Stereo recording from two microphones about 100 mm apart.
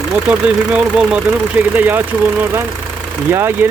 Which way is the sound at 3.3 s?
25° right (ahead or behind).